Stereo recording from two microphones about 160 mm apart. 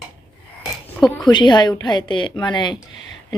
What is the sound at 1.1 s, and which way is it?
Speech, 25° left (ahead or behind).